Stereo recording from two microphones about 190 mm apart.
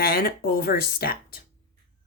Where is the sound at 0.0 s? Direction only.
55° left (ahead or behind).